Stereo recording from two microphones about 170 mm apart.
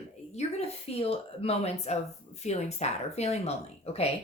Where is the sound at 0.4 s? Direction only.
40° left (ahead or behind).